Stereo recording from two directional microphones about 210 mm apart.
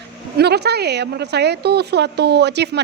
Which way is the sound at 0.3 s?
50° right (ahead or behind).